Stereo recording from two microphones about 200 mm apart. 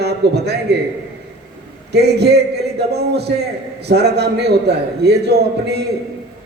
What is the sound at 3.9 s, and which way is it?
A man's voice, 55° right (ahead or behind).